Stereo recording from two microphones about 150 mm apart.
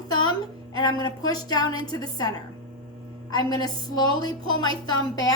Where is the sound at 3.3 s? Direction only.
25° left (ahead or behind).